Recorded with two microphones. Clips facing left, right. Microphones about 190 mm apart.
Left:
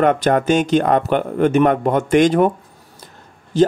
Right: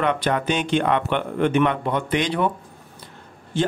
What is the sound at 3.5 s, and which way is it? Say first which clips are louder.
Speech: left 8 dB; 40° left (ahead or behind).